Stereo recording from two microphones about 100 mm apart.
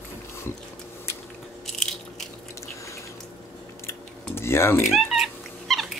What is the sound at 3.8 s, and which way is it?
Cutlery, 25° left (ahead or behind).